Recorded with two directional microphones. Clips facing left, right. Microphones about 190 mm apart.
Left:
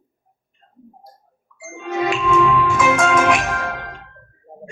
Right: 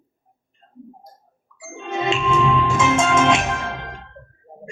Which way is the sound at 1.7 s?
25° right (ahead or behind).